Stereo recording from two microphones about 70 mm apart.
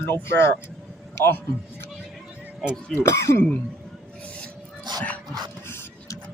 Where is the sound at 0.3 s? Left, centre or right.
Left.